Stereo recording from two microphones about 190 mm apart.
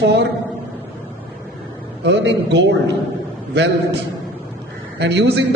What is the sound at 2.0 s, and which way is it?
Speech, 65° right (ahead or behind).